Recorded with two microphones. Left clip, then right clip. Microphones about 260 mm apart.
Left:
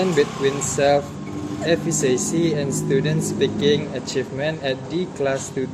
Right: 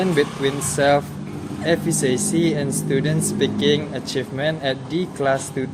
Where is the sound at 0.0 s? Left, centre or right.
Centre.